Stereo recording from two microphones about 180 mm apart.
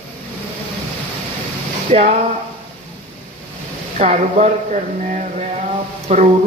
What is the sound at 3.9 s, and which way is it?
Speech, 40° right (ahead or behind).